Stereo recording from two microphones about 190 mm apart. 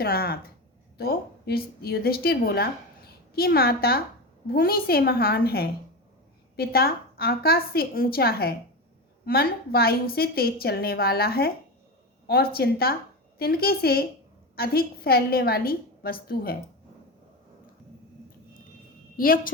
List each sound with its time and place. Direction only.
0.0 s a woman's voice: 55° left (ahead or behind)
19.1 s a woman's voice: 50° left (ahead or behind)